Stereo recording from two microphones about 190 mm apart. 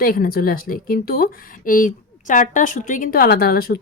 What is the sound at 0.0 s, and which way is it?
Speech, 50° left (ahead or behind).